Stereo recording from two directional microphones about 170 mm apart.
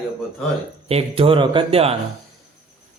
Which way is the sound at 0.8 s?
35° right (ahead or behind).